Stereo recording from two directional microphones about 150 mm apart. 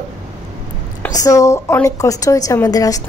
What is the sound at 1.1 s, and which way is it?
A woman's voice, 25° left (ahead or behind).